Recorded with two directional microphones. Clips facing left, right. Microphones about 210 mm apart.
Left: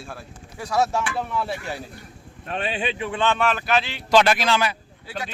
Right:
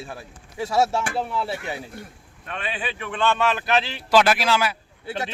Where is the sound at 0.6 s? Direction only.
25° right (ahead or behind).